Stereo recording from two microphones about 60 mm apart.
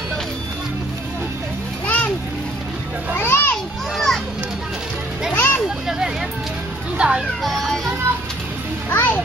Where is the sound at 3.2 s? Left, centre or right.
Left.